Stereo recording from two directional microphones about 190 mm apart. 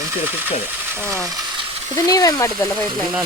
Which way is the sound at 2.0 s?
20° left (ahead or behind).